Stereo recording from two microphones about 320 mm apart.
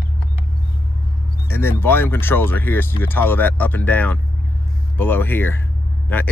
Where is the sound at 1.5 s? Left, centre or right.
Centre.